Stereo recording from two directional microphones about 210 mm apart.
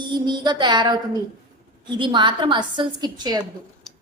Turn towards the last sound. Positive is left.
turn(degrees=-20)  # may be behind; listen again after turning